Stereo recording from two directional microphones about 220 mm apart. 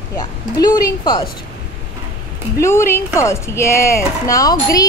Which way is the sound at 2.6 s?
10° left (ahead or behind).